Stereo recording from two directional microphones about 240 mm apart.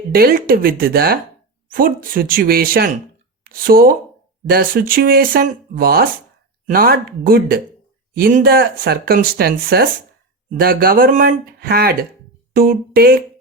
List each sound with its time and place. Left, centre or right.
0.1 s speech: right